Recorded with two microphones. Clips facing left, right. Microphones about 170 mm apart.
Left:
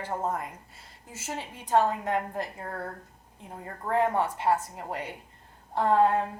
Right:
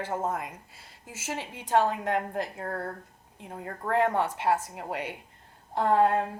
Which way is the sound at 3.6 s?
70° right (ahead or behind).